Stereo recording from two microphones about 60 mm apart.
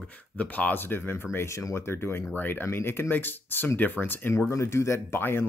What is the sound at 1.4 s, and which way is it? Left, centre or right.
Speech, left.